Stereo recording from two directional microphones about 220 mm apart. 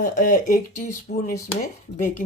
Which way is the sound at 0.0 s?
35° left (ahead or behind).